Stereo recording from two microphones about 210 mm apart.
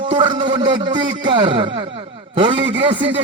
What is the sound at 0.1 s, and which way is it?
A man's voice, 25° right (ahead or behind).